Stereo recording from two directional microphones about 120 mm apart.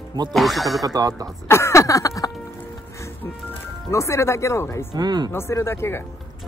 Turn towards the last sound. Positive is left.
turn(degrees=20)  # may be behind; listen again after turning